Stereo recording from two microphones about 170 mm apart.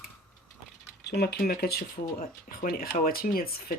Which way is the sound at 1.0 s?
75° left (ahead or behind).